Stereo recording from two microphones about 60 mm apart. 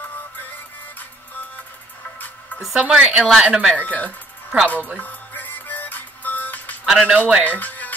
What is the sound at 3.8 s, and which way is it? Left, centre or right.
Speech, left.